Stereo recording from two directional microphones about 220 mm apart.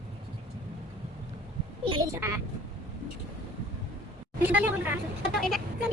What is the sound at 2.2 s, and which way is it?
Speech, 10° right (ahead or behind).